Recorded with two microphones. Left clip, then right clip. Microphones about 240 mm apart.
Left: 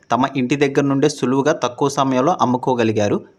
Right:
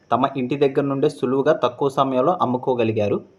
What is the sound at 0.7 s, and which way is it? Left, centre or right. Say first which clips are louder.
Speech: left 3 dB; left.